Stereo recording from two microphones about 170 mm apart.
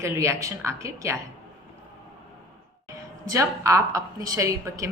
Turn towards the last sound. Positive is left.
turn(degrees=-20)  # may be behind; listen again after turning